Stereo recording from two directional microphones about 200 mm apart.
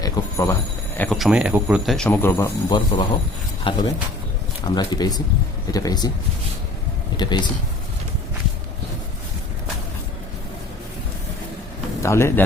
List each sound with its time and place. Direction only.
0.0 s a sound: 15° left (ahead or behind)
0.9 s speech: 5° left (ahead or behind)
3.6 s speech: 25° left (ahead or behind)
7.2 s speech: 20° left (ahead or behind)
12.0 s speech: 15° left (ahead or behind)